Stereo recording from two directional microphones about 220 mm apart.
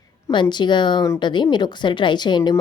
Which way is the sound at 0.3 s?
20° left (ahead or behind).